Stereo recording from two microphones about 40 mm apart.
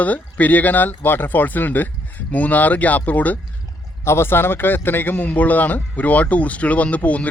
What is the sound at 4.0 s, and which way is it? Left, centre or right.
A man's voice, left.